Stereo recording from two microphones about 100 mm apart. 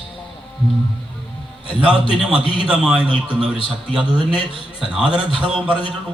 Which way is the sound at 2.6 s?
10° right (ahead or behind).